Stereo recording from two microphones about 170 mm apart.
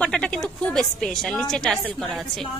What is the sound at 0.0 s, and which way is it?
A woman's voice, 5° left (ahead or behind).